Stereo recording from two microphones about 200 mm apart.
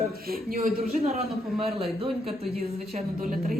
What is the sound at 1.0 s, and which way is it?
A man's voice, 30° right (ahead or behind).